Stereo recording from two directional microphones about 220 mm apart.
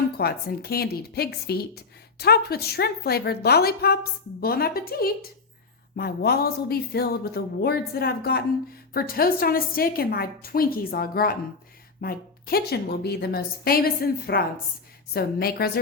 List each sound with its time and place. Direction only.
0.2 s a woman's voice: 45° left (ahead or behind)